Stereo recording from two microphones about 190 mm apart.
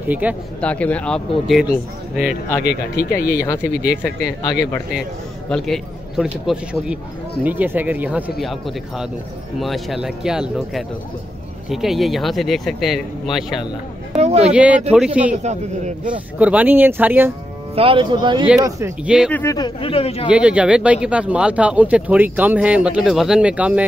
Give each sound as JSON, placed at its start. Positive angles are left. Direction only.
{"t": 0.1, "sound": "speech", "side_deg": -10}
{"t": 0.6, "sound": "speech", "side_deg": 5}
{"t": 2.6, "sound": "speech", "side_deg": 60}
{"t": 4.4, "sound": "speech", "side_deg": 20}
{"t": 5.5, "sound": "a man's voice", "side_deg": 0}
{"t": 14.1, "sound": "a sound", "side_deg": -35}
{"t": 14.5, "sound": "speech", "side_deg": -5}
{"t": 15.3, "sound": "a man's voice", "side_deg": -40}
{"t": 16.3, "sound": "speech", "side_deg": -10}
{"t": 17.7, "sound": "speech", "side_deg": -25}
{"t": 19.0, "sound": "speech", "side_deg": -5}
{"t": 19.3, "sound": "speech", "side_deg": 15}
{"t": 20.2, "sound": "speech", "side_deg": -5}